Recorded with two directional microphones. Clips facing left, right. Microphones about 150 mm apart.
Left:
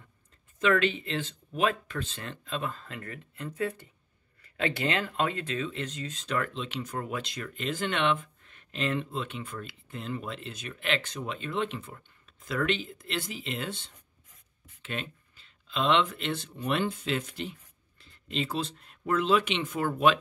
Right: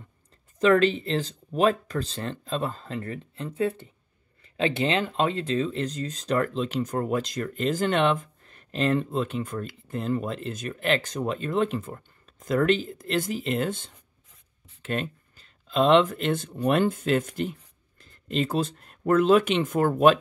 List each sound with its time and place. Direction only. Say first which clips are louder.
0.6 s speech: right 6 dB; 35° right (ahead or behind)